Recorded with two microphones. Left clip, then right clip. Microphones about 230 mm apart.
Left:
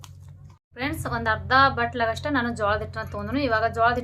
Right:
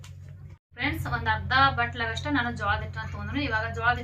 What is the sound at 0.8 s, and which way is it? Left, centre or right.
A woman's voice, left.